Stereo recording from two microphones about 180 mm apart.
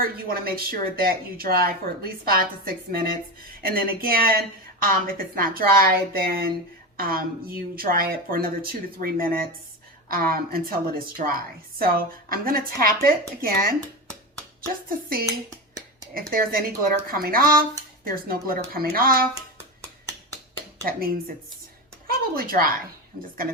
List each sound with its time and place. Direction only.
0.0 s a woman's voice: 55° right (ahead or behind)
14.8 s a woman's voice: 55° right (ahead or behind)
16.3 s a woman's voice: 55° right (ahead or behind)
20.8 s a woman's voice: 55° right (ahead or behind)
22.0 s a sound: 55° right (ahead or behind)